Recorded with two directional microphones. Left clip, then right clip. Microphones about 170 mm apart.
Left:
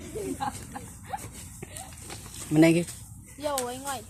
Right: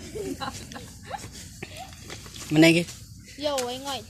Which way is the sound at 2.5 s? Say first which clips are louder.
Right 3 dB; centre (ahead or behind).